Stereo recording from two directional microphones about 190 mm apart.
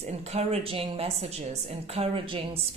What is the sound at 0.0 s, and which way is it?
A woman's voice, 35° right (ahead or behind).